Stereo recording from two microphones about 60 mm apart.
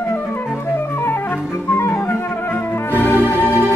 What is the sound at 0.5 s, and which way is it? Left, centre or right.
Flute, left.